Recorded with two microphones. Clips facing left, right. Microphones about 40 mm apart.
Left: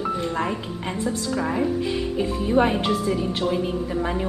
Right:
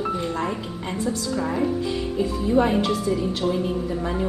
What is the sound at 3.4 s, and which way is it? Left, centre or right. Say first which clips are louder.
Speech: even; centre.